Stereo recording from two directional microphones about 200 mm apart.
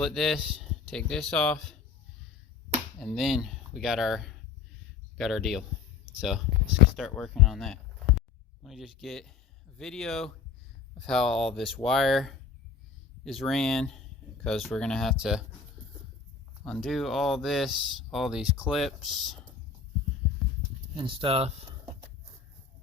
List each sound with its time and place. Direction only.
0.0 s speech: centre (ahead or behind)
3.0 s speech: centre (ahead or behind)
16.6 s speech: centre (ahead or behind)
20.9 s speech: 25° right (ahead or behind)